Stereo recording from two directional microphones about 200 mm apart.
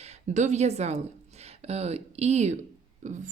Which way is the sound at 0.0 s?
35° right (ahead or behind).